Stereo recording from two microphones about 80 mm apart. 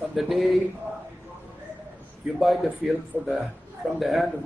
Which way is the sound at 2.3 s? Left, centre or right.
Centre.